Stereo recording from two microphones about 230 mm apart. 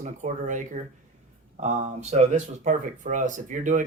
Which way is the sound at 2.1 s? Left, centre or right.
Right.